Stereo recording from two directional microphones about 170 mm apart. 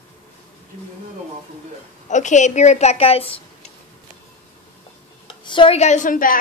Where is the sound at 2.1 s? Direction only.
45° left (ahead or behind).